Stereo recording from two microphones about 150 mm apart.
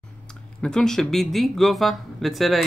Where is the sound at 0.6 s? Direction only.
5° left (ahead or behind).